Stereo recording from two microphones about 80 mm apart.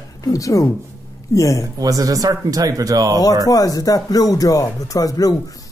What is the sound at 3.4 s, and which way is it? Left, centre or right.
Speech, left.